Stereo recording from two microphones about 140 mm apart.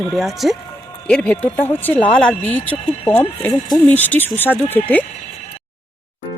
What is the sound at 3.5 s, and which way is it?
Speech, 25° left (ahead or behind).